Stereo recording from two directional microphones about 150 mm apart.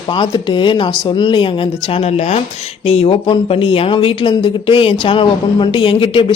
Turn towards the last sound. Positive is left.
turn(degrees=35)  # may be behind; listen again after turning